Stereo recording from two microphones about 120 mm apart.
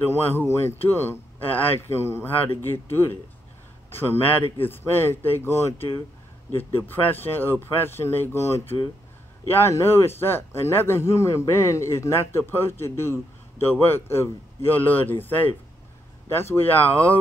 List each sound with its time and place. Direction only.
0.0 s speech: 15° left (ahead or behind)